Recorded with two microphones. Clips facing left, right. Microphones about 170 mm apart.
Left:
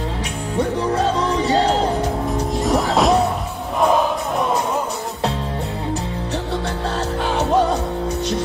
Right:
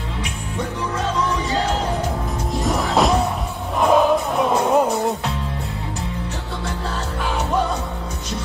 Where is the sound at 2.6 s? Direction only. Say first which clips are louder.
Left 1 dB; centre (ahead or behind).